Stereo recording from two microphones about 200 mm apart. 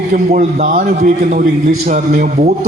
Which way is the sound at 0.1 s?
35° right (ahead or behind).